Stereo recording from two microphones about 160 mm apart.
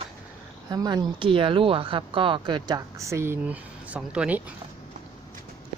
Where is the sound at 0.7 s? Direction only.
25° right (ahead or behind); by 4.4 s 5° right (ahead or behind).